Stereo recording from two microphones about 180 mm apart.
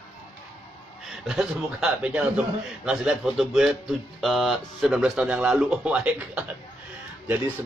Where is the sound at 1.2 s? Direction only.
5° right (ahead or behind).